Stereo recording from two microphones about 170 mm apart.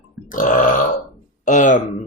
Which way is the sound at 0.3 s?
55° left (ahead or behind).